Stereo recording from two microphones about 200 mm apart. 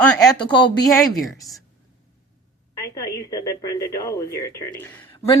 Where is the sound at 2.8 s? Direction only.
20° left (ahead or behind).